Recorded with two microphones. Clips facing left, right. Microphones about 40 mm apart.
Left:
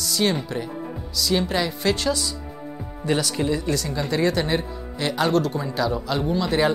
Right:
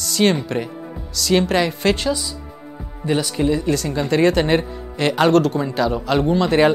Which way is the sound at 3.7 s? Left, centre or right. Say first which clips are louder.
Right 5 dB; right.